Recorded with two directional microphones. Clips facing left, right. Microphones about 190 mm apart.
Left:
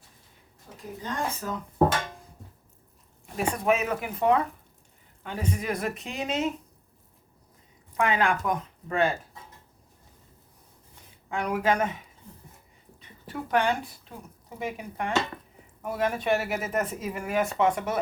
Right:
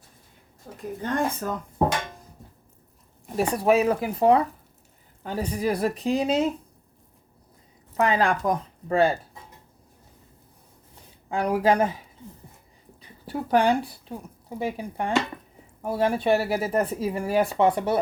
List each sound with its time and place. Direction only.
1.0 s speech: 55° right (ahead or behind)
3.3 s speech: 35° right (ahead or behind)
7.9 s speech: 35° right (ahead or behind)
11.3 s speech: 35° right (ahead or behind)